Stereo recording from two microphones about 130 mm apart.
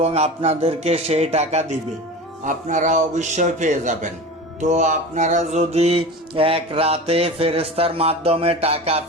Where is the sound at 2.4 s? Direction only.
75° right (ahead or behind).